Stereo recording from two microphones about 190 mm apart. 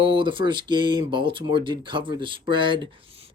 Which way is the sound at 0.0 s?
25° right (ahead or behind).